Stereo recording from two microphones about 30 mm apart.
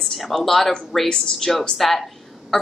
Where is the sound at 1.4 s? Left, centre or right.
Left.